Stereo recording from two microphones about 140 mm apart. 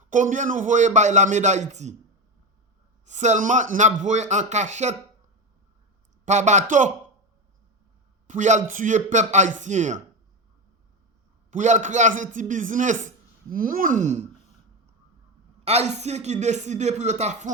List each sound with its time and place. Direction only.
0.1 s a man's voice: 65° right (ahead or behind)
3.1 s a man's voice: 55° right (ahead or behind)
6.2 s a man's voice: 55° right (ahead or behind)
8.3 s a man's voice: 60° right (ahead or behind)
11.5 s a man's voice: 60° right (ahead or behind)
15.6 s speech: 50° right (ahead or behind)